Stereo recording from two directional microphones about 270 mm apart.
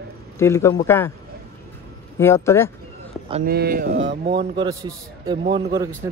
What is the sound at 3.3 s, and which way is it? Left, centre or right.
Speech, right.